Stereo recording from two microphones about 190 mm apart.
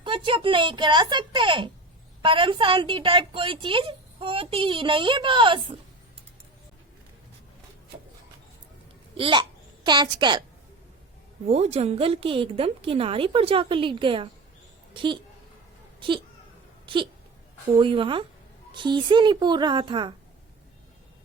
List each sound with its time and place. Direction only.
0.0 s a woman's voice: 25° right (ahead or behind)
9.1 s a child's voice: 25° right (ahead or behind)
11.4 s speech: 35° right (ahead or behind)
16.8 s a sound: 25° right (ahead or behind)
17.7 s a woman's voice: 25° right (ahead or behind)